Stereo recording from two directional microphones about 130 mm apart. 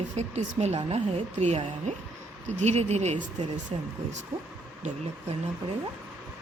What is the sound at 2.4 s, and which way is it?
Speech, 55° right (ahead or behind).